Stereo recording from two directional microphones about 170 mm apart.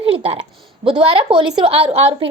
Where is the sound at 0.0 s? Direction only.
35° right (ahead or behind).